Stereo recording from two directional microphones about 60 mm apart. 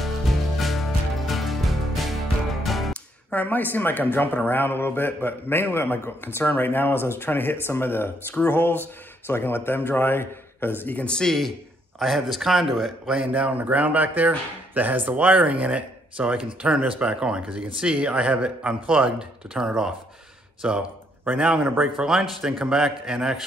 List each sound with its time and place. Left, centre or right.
0.6 s music: centre
2.9 s music: left
4.1 s a man's voice: left
11.1 s speech: centre
13.3 s a man's voice: right; by 23.4 s centre